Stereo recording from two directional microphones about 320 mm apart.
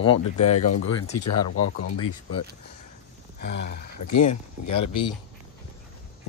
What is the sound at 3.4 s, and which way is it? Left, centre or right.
Speech, left.